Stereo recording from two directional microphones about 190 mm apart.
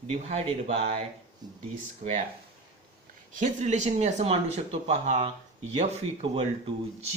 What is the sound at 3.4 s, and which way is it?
Speech, 40° right (ahead or behind).